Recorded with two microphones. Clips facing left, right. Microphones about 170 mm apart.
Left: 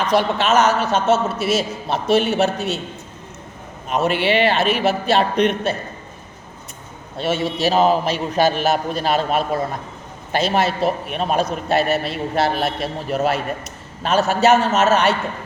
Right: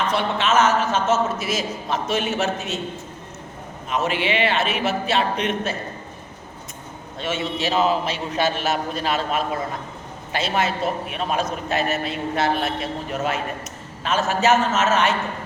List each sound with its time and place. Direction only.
0.0 s a man's voice: 40° left (ahead or behind)
3.8 s a man's voice: 35° left (ahead or behind)
7.2 s a man's voice: 35° left (ahead or behind)